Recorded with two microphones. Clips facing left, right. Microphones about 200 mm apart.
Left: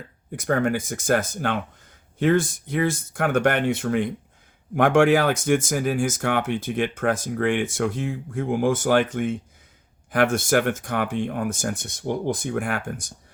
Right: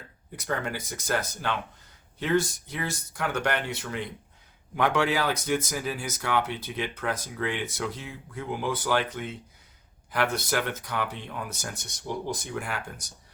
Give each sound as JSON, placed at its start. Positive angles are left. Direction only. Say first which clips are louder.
{"t": 0.3, "sound": "speech", "louder": "left 9 dB", "side_deg": 50}